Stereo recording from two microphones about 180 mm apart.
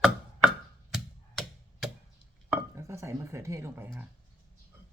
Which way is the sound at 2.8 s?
15° right (ahead or behind).